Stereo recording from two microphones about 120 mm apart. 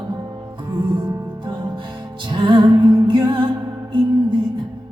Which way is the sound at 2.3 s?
40° right (ahead or behind).